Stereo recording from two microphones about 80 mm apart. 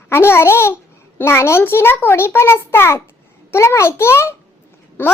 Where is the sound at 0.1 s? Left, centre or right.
Left.